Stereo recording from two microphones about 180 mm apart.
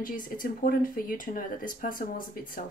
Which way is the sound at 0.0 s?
50° left (ahead or behind).